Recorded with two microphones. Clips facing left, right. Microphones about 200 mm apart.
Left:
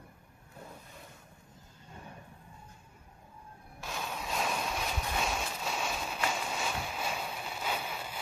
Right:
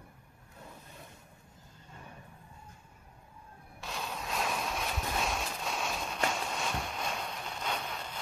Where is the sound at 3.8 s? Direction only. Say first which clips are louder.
Left 1 dB; centre (ahead or behind).